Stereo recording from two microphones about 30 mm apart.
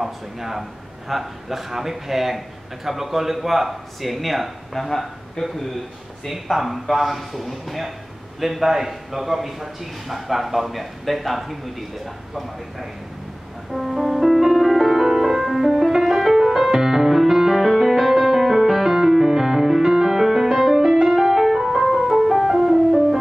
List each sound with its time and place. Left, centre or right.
0.0 s a man's voice: centre
5.4 s speech: left
6.5 s a man's voice: centre
13.7 s music: centre